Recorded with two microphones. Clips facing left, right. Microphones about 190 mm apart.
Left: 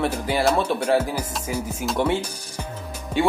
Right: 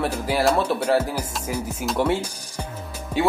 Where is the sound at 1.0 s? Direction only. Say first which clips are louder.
Even; 10° left (ahead or behind); by 2.6 s 10° right (ahead or behind).